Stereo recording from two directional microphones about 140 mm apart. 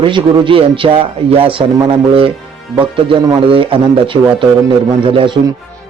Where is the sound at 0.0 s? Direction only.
40° right (ahead or behind).